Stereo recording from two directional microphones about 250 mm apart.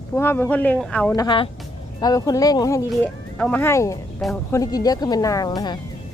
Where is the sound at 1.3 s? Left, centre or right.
Left.